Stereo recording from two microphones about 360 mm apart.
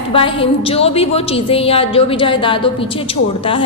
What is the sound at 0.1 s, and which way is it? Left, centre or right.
A woman's voice, centre.